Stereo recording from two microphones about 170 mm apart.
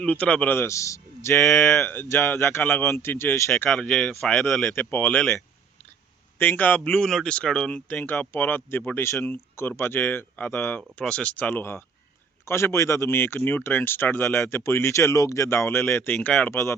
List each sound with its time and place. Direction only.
0.0 s speech: 10° left (ahead or behind)
1.4 s speech: centre (ahead or behind)
1.8 s speech: 10° left (ahead or behind)
3.5 s speech: 5° left (ahead or behind)
4.7 s speech: 10° left (ahead or behind)
6.4 s speech: 10° left (ahead or behind)